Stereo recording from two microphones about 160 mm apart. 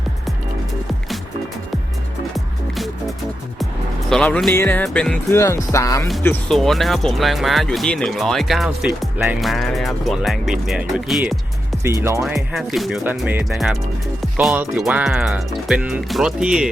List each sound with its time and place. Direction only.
2.3 s music: centre (ahead or behind)
4.1 s speech: 5° left (ahead or behind)
4.5 s music: 10° left (ahead or behind)
5.3 s speech: 20° left (ahead or behind)
6.5 s speech: centre (ahead or behind)
11.9 s music: 20° right (ahead or behind)
12.2 s speech: centre (ahead or behind)
13.1 s music: 10° right (ahead or behind)
13.4 s speech: centre (ahead or behind)